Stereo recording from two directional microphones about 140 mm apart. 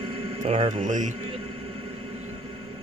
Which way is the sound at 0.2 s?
45° right (ahead or behind).